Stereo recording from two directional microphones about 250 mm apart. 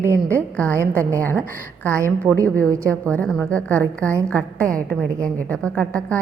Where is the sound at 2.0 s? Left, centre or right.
Centre.